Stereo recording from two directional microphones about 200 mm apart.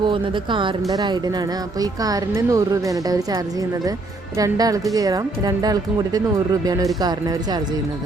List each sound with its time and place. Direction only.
0.1 s speech: 25° right (ahead or behind)